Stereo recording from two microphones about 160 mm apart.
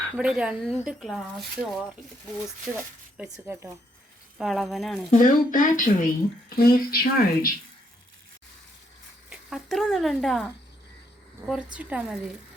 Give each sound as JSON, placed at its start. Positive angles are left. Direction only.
{"t": 0.2, "sound": "speech", "side_deg": -5}
{"t": 2.7, "sound": "speech", "side_deg": -15}
{"t": 4.4, "sound": "speech", "side_deg": 0}
{"t": 5.1, "sound": "speech", "side_deg": 60}
{"t": 6.6, "sound": "speech", "side_deg": 70}
{"t": 9.3, "sound": "speech", "side_deg": 0}